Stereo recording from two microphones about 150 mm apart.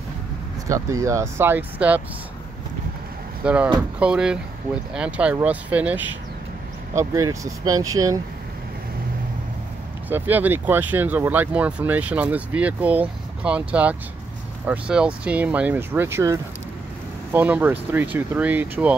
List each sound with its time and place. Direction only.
0.7 s speech: 20° right (ahead or behind)
3.4 s speech: 10° right (ahead or behind)
7.0 s speech: 20° right (ahead or behind)
10.0 s speech: 10° right (ahead or behind)